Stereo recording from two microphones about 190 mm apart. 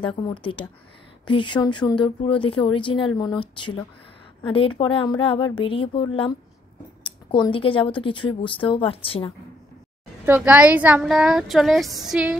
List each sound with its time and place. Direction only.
0.0 s speech: 25° left (ahead or behind)
10.2 s speech: 10° right (ahead or behind)